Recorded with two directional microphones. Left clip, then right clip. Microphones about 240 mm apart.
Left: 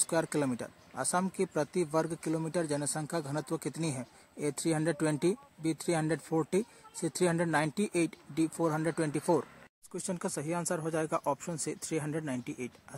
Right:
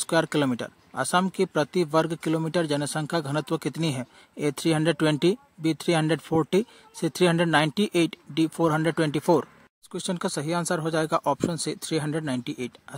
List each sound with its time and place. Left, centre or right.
0.0 s speech: right